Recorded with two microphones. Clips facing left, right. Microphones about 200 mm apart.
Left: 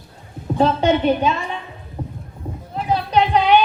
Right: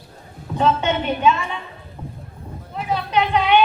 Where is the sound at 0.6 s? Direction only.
35° left (ahead or behind).